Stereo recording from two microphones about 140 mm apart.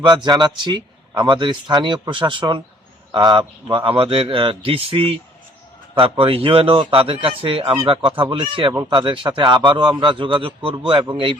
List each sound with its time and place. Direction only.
0.2 s a man's voice: 30° right (ahead or behind)